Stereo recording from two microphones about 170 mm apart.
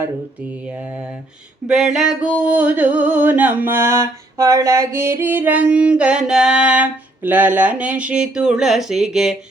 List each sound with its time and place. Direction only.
0.7 s music: 10° right (ahead or behind)